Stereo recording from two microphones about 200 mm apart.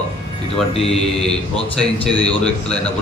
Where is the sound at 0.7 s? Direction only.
30° left (ahead or behind).